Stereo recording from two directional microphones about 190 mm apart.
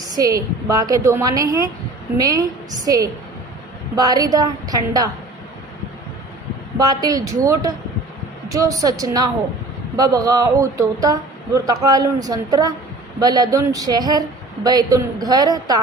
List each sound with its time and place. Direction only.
0.2 s speech: 20° right (ahead or behind)
6.7 s speech: 20° right (ahead or behind)